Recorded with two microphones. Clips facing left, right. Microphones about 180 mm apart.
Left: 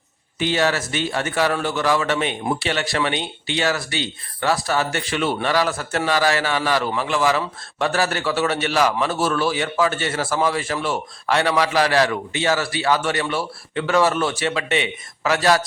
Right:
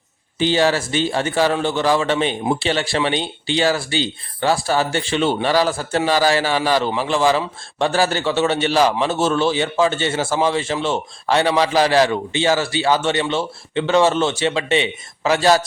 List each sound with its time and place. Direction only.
0.3 s a man's voice: 30° right (ahead or behind)